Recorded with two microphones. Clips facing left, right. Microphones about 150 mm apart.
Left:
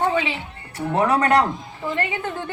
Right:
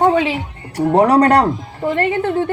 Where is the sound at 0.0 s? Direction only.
40° right (ahead or behind).